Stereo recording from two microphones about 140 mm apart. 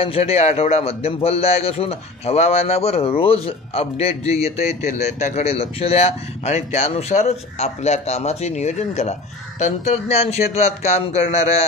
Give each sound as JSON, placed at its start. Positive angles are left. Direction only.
{"t": 0.0, "sound": "a man's voice", "side_deg": 45}